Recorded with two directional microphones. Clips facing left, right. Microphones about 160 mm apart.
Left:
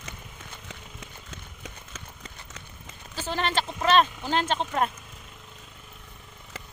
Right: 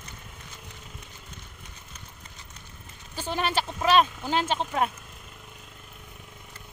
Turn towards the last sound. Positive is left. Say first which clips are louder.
# even
turn(degrees=-5)  # may be behind; listen again after turning